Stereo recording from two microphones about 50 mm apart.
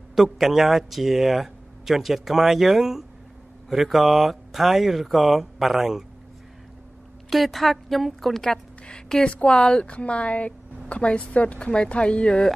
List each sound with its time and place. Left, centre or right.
0.1 s speech: centre
7.2 s speech: centre
9.2 s speech: left